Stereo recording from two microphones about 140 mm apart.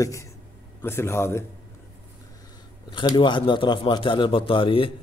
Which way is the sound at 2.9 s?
35° left (ahead or behind).